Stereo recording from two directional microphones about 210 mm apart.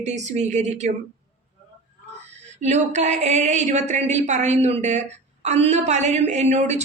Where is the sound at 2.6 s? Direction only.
35° right (ahead or behind).